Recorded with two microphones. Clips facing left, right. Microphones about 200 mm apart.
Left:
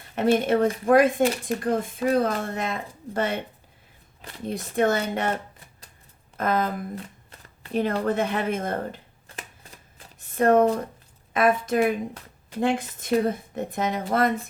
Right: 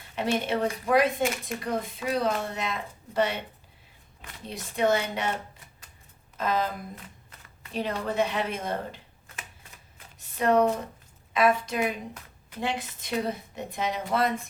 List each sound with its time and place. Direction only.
0.2 s a woman's voice: 50° left (ahead or behind)
1.2 s speech: 35° left (ahead or behind)
2.0 s a woman's voice: 50° left (ahead or behind)
4.4 s a woman's voice: 50° left (ahead or behind)
6.3 s a woman's voice: 50° left (ahead or behind)
6.9 s shuffling cards: 30° left (ahead or behind)
7.7 s a woman's voice: 50° left (ahead or behind)
10.2 s a sound: 50° left (ahead or behind)
11.3 s a woman's voice: 50° left (ahead or behind)